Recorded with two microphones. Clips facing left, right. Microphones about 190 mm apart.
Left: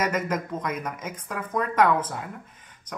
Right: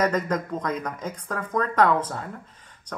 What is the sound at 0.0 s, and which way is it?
Speech, 20° left (ahead or behind).